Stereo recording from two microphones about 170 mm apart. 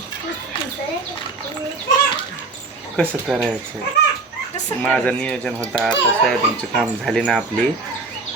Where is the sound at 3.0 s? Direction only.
Centre (ahead or behind).